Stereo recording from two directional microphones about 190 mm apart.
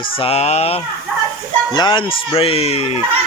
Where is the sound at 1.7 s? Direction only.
20° left (ahead or behind).